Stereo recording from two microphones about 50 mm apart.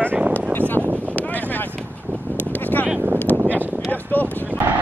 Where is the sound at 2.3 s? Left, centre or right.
Left.